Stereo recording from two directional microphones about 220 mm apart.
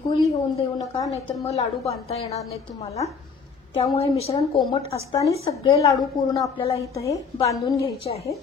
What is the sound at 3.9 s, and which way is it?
Speech, 25° left (ahead or behind).